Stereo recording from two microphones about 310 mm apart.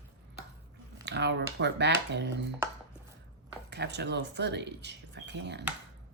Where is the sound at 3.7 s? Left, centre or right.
Right.